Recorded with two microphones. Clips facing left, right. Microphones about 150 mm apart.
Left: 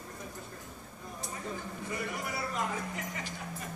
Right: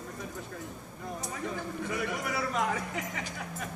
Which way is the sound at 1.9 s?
80° right.